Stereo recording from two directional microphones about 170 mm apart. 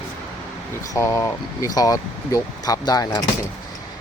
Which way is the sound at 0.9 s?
15° left (ahead or behind).